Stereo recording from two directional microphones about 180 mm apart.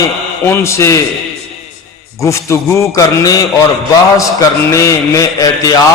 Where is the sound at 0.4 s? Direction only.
15° left (ahead or behind).